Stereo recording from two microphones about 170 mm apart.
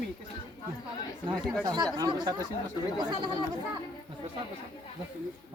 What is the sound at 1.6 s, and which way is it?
Speech, 25° right (ahead or behind).